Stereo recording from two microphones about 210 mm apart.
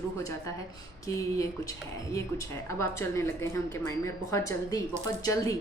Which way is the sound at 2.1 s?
15° left (ahead or behind).